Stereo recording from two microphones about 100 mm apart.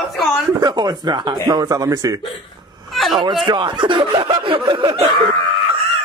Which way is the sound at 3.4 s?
55° right (ahead or behind).